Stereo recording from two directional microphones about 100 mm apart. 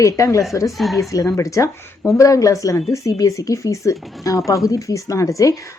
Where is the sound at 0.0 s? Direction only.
30° left (ahead or behind).